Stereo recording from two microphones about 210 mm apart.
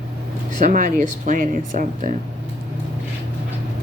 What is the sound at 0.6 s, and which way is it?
Speech, 40° right (ahead or behind).